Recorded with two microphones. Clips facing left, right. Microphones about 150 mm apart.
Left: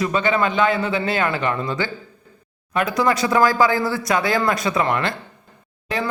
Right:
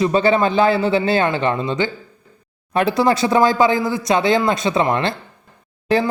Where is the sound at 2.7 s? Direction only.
30° right (ahead or behind).